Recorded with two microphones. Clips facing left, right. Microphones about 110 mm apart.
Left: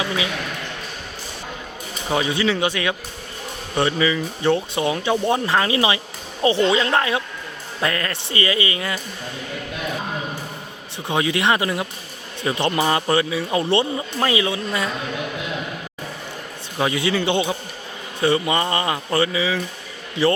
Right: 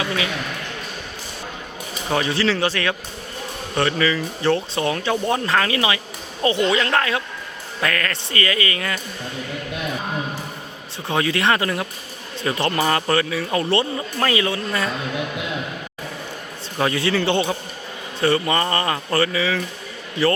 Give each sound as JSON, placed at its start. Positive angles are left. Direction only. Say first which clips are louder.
{"t": 2.1, "sound": "speech", "louder": "even", "side_deg": 15}
{"t": 10.9, "sound": "speech", "louder": "even", "side_deg": 20}
{"t": 16.7, "sound": "speech", "louder": "right 1 dB", "side_deg": 15}